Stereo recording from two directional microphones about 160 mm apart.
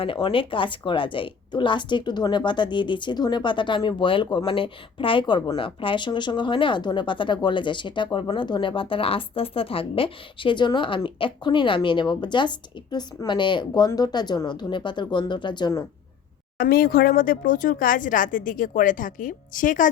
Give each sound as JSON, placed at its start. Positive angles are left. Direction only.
{"t": 0.0, "sound": "a woman's voice", "side_deg": 35}
{"t": 16.6, "sound": "speech", "side_deg": 65}